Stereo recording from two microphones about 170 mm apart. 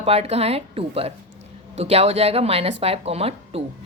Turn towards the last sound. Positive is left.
turn(degrees=-35)  # may be behind; listen again after turning